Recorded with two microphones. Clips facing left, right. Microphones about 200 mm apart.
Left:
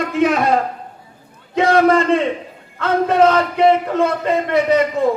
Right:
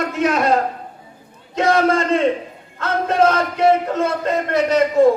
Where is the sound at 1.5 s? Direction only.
55° left (ahead or behind).